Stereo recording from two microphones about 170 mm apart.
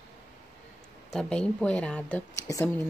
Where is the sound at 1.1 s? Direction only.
5° left (ahead or behind).